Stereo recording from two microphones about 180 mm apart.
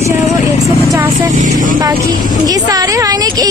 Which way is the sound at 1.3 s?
45° right (ahead or behind).